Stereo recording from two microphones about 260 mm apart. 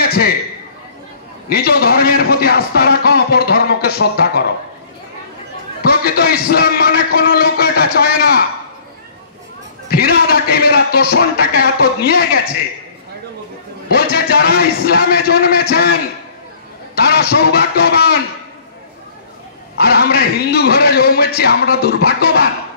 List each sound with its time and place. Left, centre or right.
0.0 s a sound: left
1.5 s a man's voice: left
5.9 s a man's voice: left
9.8 s a man's voice: left
13.8 s a man's voice: left
17.1 s a man's voice: left
19.9 s a man's voice: left